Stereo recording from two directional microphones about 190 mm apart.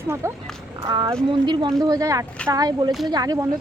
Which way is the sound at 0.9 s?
20° right (ahead or behind).